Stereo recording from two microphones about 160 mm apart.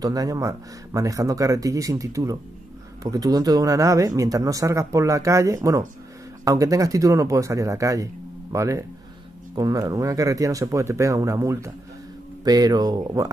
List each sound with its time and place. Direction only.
0.0 s speech: 20° right (ahead or behind)